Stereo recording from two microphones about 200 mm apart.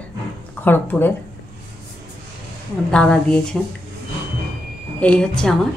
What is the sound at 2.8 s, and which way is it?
Speech, 5° left (ahead or behind).